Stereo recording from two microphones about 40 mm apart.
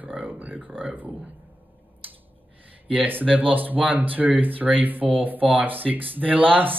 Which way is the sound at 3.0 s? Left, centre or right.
Right.